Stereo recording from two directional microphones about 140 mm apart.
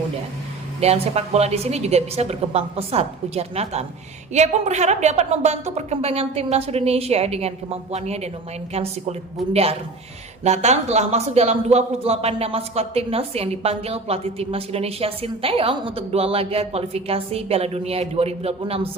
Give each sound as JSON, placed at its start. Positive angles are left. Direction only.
{"t": 0.8, "sound": "speech", "side_deg": -50}
{"t": 9.5, "sound": "speech", "side_deg": -45}